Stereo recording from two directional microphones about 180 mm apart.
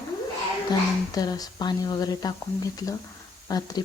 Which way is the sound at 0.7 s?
20° left (ahead or behind).